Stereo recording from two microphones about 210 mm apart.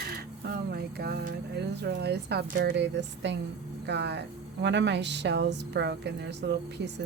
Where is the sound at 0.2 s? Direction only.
50° right (ahead or behind).